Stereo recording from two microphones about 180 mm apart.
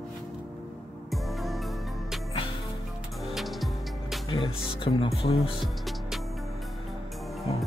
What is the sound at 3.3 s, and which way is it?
Music, centre (ahead or behind).